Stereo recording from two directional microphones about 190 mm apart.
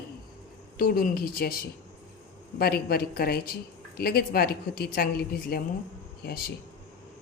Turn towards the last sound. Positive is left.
turn(degrees=55)  # may be behind; listen again after turning